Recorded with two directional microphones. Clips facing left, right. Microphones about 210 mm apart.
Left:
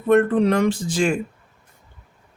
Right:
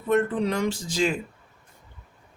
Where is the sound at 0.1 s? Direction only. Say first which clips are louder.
Left 7 dB; 60° left (ahead or behind).